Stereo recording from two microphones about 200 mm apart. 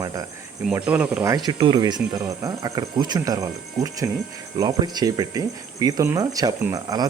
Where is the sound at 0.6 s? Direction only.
5° right (ahead or behind).